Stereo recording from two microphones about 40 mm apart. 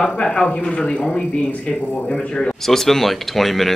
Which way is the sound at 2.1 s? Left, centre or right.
Centre.